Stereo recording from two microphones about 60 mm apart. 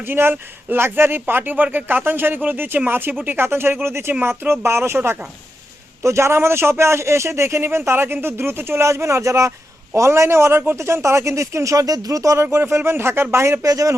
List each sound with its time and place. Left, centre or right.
0.0 s a man's voice: right
6.0 s a man's voice: right
13.7 s speech: right